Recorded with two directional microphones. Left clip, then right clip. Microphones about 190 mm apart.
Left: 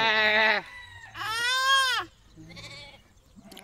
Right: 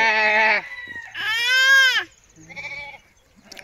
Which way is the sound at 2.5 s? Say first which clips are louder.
Right 12 dB; 80° left.